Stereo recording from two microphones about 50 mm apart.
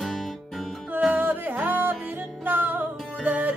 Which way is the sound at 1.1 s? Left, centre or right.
Right.